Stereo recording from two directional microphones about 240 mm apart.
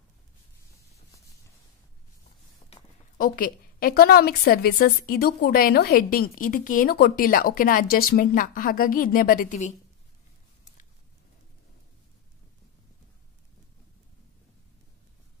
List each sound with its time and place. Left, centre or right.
3.2 s a woman's voice: left